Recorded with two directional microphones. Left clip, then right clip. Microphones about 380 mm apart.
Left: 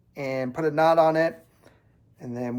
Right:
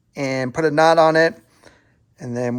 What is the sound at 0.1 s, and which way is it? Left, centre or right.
Speech, right.